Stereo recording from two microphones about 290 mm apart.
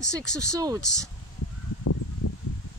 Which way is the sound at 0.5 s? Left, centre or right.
Centre.